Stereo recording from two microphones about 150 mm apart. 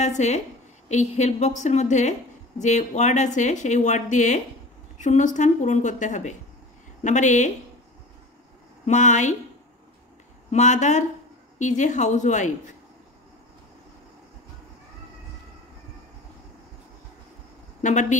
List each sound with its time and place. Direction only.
0.0 s a woman's voice: 50° left (ahead or behind)
8.8 s speech: 55° left (ahead or behind)
10.5 s a woman's voice: 50° left (ahead or behind)
17.8 s a woman's voice: 55° left (ahead or behind)